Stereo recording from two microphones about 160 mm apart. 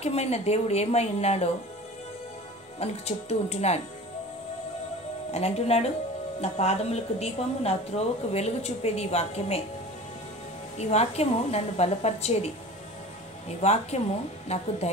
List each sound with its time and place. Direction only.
0.0 s a woman's voice: 40° left (ahead or behind)
2.8 s a woman's voice: 40° left (ahead or behind)
5.3 s a woman's voice: 40° left (ahead or behind)
10.8 s a woman's voice: 40° left (ahead or behind)
13.6 s speech: 45° left (ahead or behind)